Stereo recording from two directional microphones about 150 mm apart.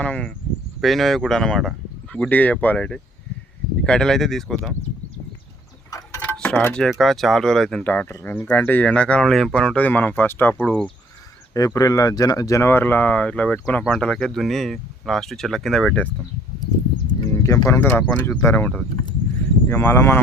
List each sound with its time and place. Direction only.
0.0 s a sound: 5° left (ahead or behind)
0.8 s speech: centre (ahead or behind)
5.9 s mechanisms: 15° left (ahead or behind)
6.3 s a sound: 10° left (ahead or behind)
6.8 s speech: centre (ahead or behind)
11.5 s speech: 20° left (ahead or behind); by 16.0 s 5° left (ahead or behind)
17.2 s speech: 20° left (ahead or behind)